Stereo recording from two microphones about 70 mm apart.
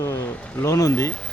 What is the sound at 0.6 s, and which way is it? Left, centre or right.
Speech, left.